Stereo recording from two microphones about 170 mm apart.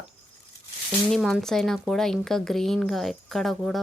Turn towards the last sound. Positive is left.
turn(degrees=0)  # may be behind; listen again after turning